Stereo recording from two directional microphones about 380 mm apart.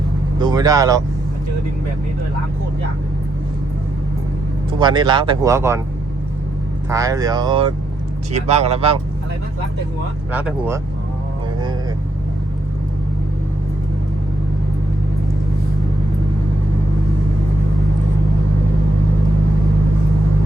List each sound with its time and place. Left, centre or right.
0.3 s speech: centre
4.8 s speech: centre
6.9 s speech: centre
10.3 s speech: centre